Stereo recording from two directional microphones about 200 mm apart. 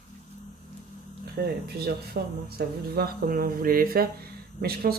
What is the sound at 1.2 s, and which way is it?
Speech, 50° right (ahead or behind).